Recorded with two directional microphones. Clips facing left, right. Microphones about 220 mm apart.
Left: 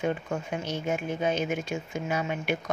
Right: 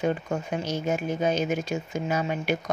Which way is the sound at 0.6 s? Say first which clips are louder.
Right 3 dB; 40° right (ahead or behind).